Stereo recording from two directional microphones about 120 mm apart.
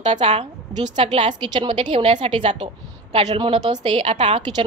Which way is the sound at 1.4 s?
40° right (ahead or behind).